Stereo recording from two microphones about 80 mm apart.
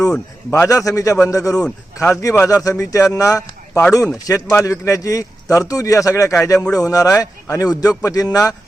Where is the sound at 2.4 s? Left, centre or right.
Left.